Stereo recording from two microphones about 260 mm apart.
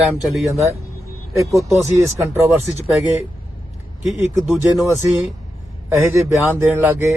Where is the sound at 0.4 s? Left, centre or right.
Right.